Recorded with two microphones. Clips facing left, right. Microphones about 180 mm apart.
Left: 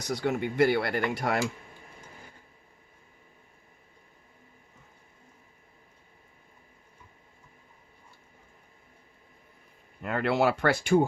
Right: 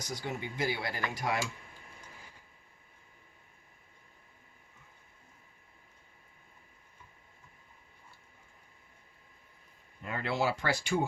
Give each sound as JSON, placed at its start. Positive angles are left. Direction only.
{"t": 0.0, "sound": "speech", "side_deg": 65}
{"t": 10.0, "sound": "speech", "side_deg": 65}